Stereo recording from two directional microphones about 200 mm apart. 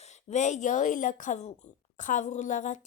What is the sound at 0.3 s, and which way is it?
A woman's voice, 35° left (ahead or behind).